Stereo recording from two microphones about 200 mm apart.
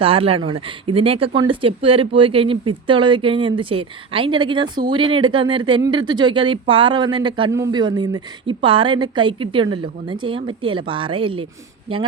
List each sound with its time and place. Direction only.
0.0 s speech: 30° right (ahead or behind)